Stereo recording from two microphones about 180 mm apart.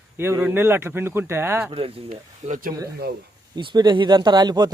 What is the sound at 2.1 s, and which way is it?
Speech, 45° right (ahead or behind).